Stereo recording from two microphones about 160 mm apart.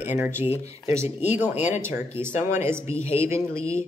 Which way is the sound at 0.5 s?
40° left (ahead or behind).